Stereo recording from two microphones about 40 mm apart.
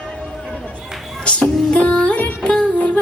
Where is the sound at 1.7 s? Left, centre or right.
Left.